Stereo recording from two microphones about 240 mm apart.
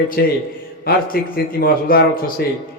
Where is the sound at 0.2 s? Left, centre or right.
Left.